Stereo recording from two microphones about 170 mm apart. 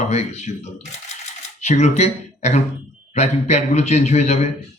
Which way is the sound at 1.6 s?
40° left (ahead or behind).